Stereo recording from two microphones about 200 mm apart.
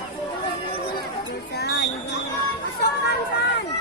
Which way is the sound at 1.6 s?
55° left (ahead or behind).